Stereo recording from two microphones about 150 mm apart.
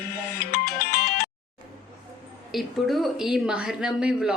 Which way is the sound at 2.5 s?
Centre (ahead or behind).